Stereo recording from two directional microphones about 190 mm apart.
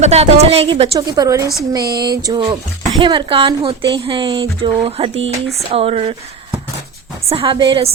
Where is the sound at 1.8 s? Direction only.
55° right (ahead or behind).